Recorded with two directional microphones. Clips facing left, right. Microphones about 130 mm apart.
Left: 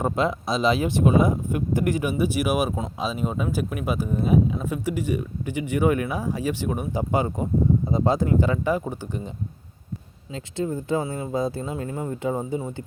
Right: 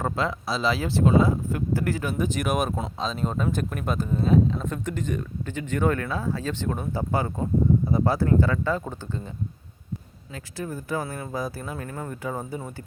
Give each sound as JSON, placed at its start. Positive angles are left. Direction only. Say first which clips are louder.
{"t": 0.0, "sound": "speech", "louder": "left 3 dB", "side_deg": 20}
{"t": 10.3, "sound": "speech", "louder": "left 6 dB", "side_deg": 25}